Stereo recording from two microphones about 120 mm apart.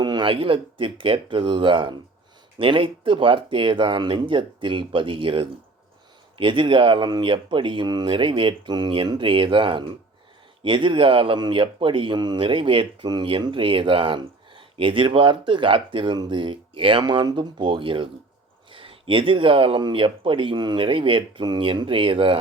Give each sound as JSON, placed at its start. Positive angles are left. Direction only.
{"t": 0.0, "sound": "speech", "side_deg": -35}